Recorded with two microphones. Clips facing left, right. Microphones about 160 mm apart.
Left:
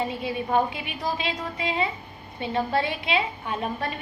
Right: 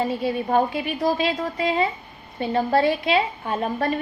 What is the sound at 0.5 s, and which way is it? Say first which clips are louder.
A woman's voice: right 2 dB; 40° right (ahead or behind).